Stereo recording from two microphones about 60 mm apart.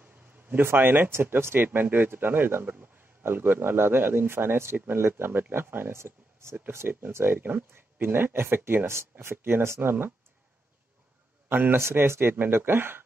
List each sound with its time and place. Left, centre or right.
0.5 s speech: right
11.4 s a man's voice: right